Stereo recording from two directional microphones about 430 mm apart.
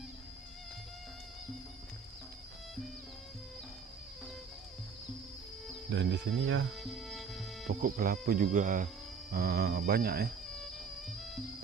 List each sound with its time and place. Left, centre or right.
5.9 s speech: right
6.7 s music: centre
7.6 s speech: centre